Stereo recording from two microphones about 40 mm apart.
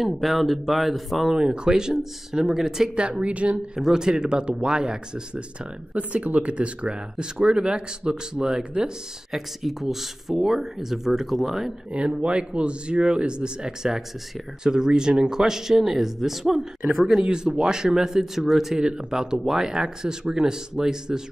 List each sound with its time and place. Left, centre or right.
0.0 s speech: centre
1.3 s speech: centre
3.0 s speech: right
3.7 s speech: centre
5.9 s speech: right; by 8.9 s centre
9.3 s speech: centre
11.9 s speech: right; by 18.8 s centre
18.8 s speech: right